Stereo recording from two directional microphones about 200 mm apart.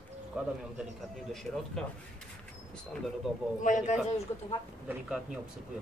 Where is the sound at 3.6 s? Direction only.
40° left (ahead or behind).